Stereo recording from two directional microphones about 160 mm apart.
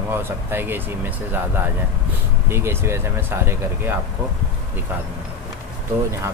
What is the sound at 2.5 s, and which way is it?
Speech, 15° right (ahead or behind).